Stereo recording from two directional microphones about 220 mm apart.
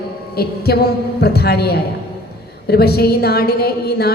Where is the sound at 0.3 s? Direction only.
45° left (ahead or behind).